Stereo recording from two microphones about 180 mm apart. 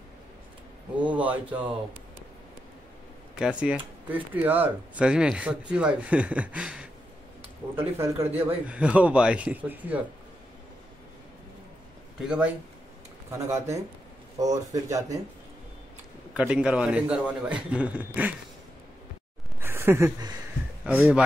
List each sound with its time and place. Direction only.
0.9 s speech: 10° right (ahead or behind)
3.3 s speech: 5° right (ahead or behind)
13.3 s speech: 15° right (ahead or behind)
16.3 s speech: 5° right (ahead or behind)
19.6 s a sound: 15° right (ahead or behind)
20.8 s speech: 5° right (ahead or behind)